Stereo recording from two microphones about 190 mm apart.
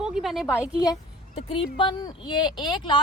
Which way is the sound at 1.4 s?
30° left (ahead or behind).